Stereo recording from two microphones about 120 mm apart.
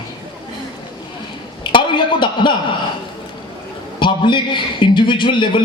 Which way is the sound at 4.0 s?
40° left (ahead or behind).